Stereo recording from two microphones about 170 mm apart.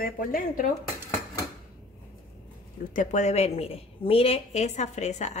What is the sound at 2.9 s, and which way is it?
A woman's voice, 45° left (ahead or behind).